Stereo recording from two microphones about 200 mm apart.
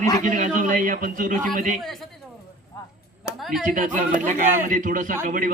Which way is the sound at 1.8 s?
Centre (ahead or behind).